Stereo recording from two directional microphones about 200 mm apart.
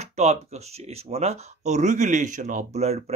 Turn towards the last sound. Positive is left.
turn(degrees=-35)  # may be behind; listen again after turning